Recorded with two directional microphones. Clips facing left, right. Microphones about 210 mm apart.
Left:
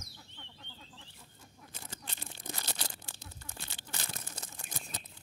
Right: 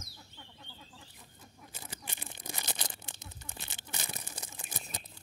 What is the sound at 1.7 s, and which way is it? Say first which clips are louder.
Tearing: right 1 dB; 10° right (ahead or behind).